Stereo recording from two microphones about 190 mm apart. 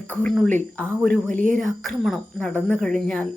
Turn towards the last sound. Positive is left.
turn(degrees=5)  # may be behind; listen again after turning